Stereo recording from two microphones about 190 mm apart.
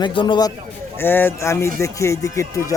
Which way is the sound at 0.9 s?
10° left (ahead or behind).